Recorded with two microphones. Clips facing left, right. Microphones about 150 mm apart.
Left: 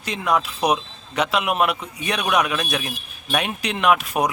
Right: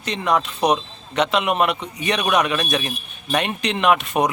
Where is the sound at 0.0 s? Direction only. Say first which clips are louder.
Right 1 dB; 5° left (ahead or behind).